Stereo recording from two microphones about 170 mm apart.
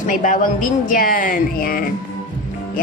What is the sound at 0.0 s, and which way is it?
Speech, 50° left (ahead or behind).